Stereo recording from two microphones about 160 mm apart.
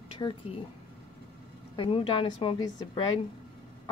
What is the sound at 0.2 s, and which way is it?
Speech, 25° left (ahead or behind).